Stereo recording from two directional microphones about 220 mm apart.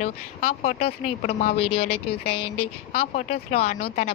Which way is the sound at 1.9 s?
90° left.